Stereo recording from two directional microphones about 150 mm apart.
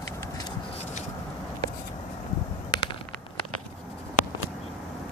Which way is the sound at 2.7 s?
25° left (ahead or behind).